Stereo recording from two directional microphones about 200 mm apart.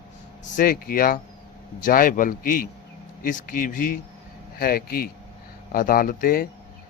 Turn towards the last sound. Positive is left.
turn(degrees=45)  # may be behind; listen again after turning